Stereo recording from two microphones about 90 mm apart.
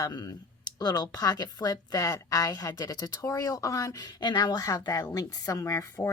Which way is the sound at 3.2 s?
35° left (ahead or behind).